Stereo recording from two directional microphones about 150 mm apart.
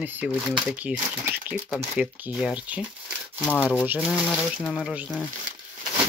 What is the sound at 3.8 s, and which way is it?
Speech, 10° right (ahead or behind).